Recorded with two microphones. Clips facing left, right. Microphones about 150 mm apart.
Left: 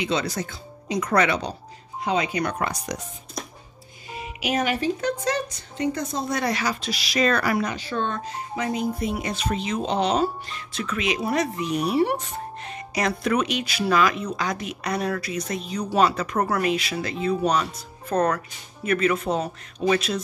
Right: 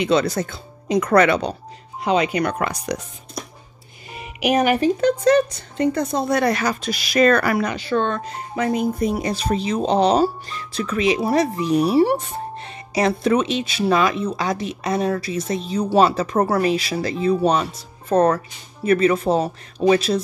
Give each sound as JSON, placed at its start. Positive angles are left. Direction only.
{"t": 0.0, "sound": "speech", "side_deg": -60}
{"t": 2.0, "sound": "speech", "side_deg": -70}
{"t": 4.1, "sound": "speech", "side_deg": -60}
{"t": 9.1, "sound": "speech", "side_deg": -35}